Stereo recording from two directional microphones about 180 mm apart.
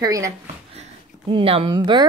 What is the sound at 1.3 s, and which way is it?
Speech, 30° right (ahead or behind).